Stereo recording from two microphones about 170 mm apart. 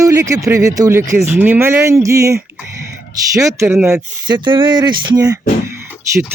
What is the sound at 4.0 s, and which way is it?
Speech, 25° right (ahead or behind).